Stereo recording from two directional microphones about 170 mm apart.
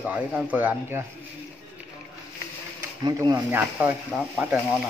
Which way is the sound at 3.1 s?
20° right (ahead or behind).